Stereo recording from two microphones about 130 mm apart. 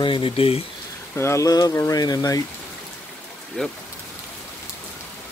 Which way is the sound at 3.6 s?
5° left (ahead or behind).